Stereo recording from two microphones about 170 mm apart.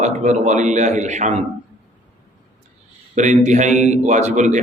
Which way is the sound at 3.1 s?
45° right (ahead or behind).